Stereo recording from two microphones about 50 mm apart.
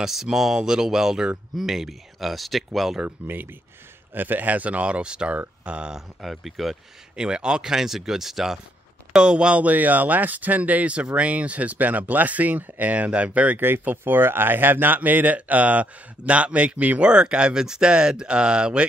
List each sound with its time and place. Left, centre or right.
0.0 s speech: centre
3.2 s speech: right
5.9 s speech: centre
7.2 s speech: centre
9.1 s speech: centre
13.6 s speech: right; by 18.9 s centre